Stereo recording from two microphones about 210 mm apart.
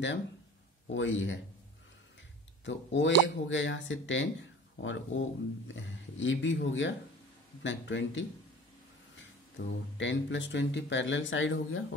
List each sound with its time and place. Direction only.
0.8 s speech: 65° left (ahead or behind)
2.6 s speech: 60° left (ahead or behind)
9.6 s speech: 65° left (ahead or behind)